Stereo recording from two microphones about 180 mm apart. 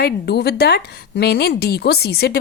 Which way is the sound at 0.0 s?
65° left (ahead or behind).